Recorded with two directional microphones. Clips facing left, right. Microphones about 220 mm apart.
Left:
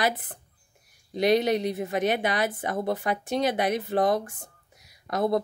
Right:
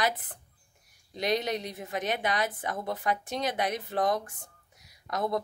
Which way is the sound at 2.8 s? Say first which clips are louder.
Left 9 dB; 30° left (ahead or behind).